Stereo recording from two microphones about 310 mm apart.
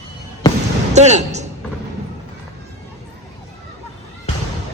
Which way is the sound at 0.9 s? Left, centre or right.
Right.